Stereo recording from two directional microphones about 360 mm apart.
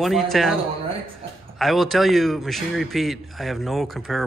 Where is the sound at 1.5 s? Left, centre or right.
Centre.